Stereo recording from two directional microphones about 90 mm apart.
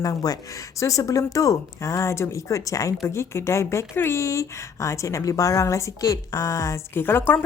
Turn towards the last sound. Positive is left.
turn(degrees=25)  # may be behind; listen again after turning